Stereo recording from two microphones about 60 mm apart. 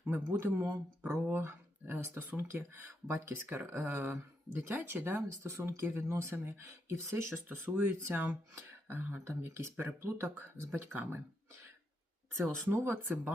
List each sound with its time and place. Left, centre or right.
0.0 s speech: right
8.5 s beatboxing: right
9.2 s speech: right
12.7 s speech: right